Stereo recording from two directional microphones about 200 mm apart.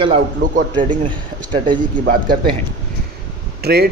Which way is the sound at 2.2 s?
25° right (ahead or behind).